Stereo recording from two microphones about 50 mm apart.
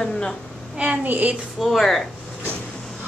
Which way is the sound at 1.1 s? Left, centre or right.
Right.